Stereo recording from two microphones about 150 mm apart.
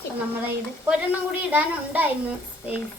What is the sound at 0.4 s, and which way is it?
A child's voice, 10° right (ahead or behind).